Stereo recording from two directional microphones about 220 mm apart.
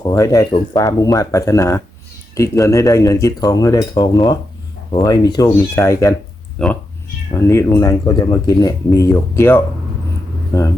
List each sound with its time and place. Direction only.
0.0 s speech: 15° left (ahead or behind)